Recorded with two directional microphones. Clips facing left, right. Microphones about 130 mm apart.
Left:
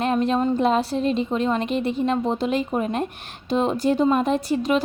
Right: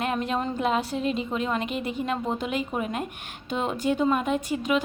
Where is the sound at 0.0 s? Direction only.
25° left (ahead or behind).